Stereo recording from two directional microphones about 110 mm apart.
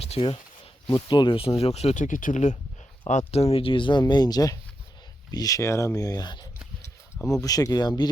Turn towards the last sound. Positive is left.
turn(degrees=35)  # may be behind; listen again after turning